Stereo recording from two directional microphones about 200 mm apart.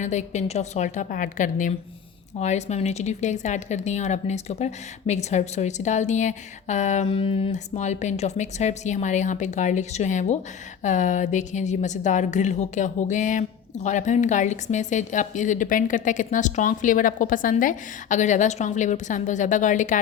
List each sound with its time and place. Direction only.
0.0 s speech: 35° left (ahead or behind)